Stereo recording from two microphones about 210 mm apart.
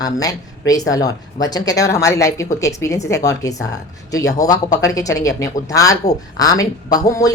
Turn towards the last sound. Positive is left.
turn(degrees=15)  # may be behind; listen again after turning